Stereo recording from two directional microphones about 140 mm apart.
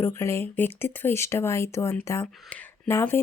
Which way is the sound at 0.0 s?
20° left (ahead or behind).